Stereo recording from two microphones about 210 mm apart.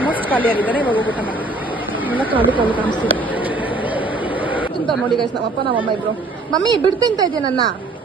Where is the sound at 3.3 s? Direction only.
5° right (ahead or behind).